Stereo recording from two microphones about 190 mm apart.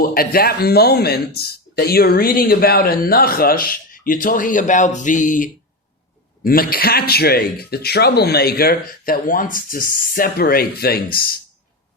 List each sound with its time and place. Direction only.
0.0 s speech: 50° left (ahead or behind)